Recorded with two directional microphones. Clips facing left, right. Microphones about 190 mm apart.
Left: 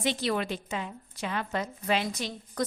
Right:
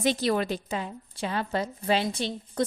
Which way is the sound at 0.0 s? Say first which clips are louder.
Right 4 dB; 40° right (ahead or behind).